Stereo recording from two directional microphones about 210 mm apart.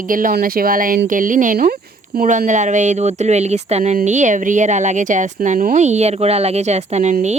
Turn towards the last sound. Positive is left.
turn(degrees=-35)  # may be behind; listen again after turning